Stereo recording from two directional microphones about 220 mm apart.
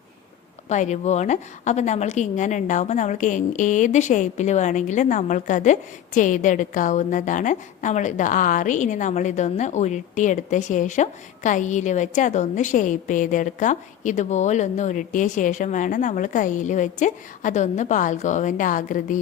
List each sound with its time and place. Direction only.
0.7 s a woman's voice: 30° left (ahead or behind)